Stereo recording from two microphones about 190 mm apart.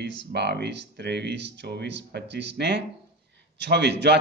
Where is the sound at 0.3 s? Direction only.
60° right (ahead or behind).